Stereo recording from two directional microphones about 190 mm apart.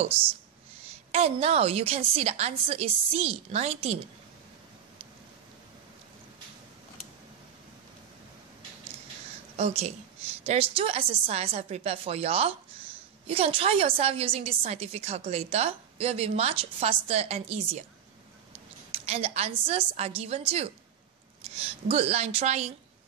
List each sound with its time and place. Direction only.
1.1 s a woman's voice: 35° right (ahead or behind)
9.6 s a woman's voice: 35° right (ahead or behind)
18.9 s a woman's voice: 30° right (ahead or behind)